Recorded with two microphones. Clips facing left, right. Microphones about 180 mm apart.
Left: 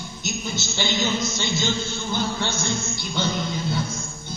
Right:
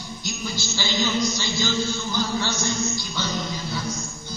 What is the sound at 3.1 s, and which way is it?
Music, 25° left (ahead or behind).